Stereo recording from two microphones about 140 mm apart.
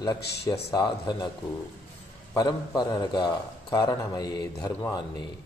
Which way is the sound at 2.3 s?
30° left (ahead or behind).